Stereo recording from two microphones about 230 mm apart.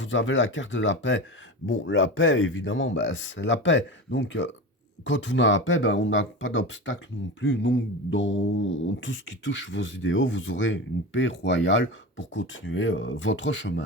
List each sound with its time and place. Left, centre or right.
0.0 s speech: left